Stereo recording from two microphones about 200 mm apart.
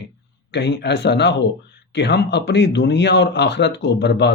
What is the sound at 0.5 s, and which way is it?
Speech, 60° left (ahead or behind).